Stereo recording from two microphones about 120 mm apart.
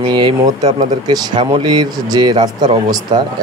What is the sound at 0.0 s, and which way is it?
Speech, 40° right (ahead or behind).